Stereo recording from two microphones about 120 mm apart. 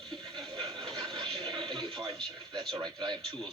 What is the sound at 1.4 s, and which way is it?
Television, 40° right (ahead or behind).